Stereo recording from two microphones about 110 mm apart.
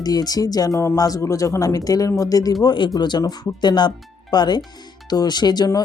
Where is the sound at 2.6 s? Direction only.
45° left (ahead or behind).